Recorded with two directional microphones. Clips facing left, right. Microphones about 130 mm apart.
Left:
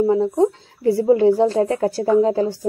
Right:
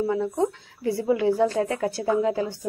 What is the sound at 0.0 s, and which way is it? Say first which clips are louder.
Speech: left 7 dB; 30° left (ahead or behind).